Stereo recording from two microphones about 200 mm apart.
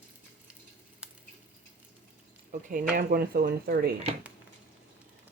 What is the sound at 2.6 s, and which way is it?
Speech, 45° right (ahead or behind).